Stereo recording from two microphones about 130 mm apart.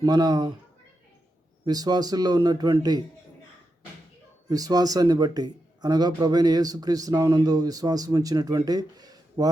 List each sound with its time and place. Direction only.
0.0 s speech: 30° right (ahead or behind)
1.6 s speech: 30° right (ahead or behind)
4.4 s speech: 30° right (ahead or behind)